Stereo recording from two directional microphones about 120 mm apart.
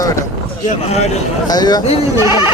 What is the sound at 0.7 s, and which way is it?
Speech, 65° left (ahead or behind).